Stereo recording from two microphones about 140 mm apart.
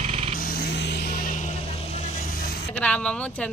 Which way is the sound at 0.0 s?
50° right (ahead or behind).